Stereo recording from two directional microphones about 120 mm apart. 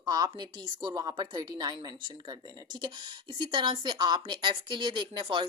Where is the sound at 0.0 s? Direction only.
35° right (ahead or behind).